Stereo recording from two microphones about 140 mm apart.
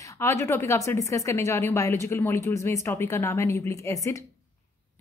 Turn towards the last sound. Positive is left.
turn(degrees=20)  # may be behind; listen again after turning